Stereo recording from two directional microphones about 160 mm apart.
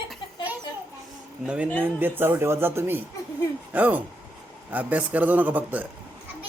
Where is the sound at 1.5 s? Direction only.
5° right (ahead or behind).